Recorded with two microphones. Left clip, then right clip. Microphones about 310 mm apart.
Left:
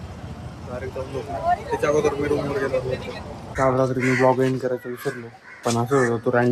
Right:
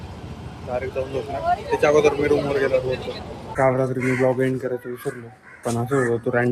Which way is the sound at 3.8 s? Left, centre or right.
Centre.